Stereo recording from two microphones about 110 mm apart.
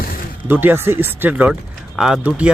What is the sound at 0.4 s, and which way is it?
Speech, 15° right (ahead or behind).